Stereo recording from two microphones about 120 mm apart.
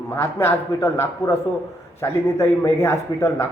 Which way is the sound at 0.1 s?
20° left (ahead or behind).